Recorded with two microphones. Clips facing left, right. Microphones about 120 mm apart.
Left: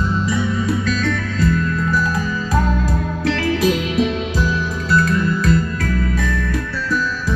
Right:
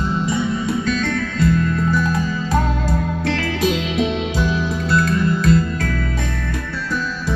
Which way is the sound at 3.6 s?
25° right (ahead or behind).